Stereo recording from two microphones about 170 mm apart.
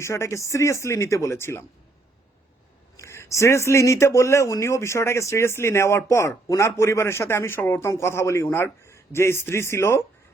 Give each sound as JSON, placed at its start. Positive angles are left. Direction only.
{"t": 0.0, "sound": "speech", "side_deg": 15}
{"t": 3.0, "sound": "speech", "side_deg": 15}